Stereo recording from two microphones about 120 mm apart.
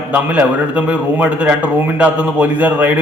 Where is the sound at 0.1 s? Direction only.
10° right (ahead or behind).